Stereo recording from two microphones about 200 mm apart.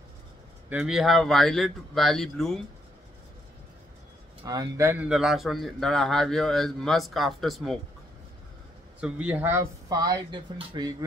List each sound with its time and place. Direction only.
0.7 s a man's voice: 5° right (ahead or behind)
4.5 s a man's voice: 15° right (ahead or behind); by 7.8 s centre (ahead or behind)
9.0 s speech: 5° right (ahead or behind)